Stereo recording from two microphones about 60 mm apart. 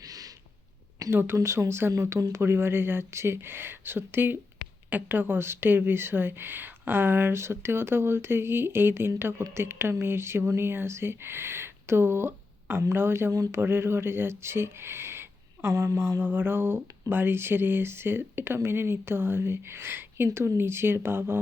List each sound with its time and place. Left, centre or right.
1.1 s speech: right
16.2 s speech: right